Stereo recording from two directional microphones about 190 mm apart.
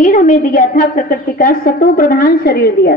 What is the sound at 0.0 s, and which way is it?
A woman's voice, 45° left (ahead or behind).